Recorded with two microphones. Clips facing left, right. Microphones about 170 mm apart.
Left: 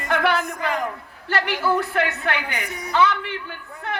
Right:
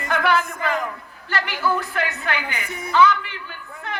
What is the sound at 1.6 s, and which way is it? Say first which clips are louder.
Speech: left 1 dB; 30° left (ahead or behind).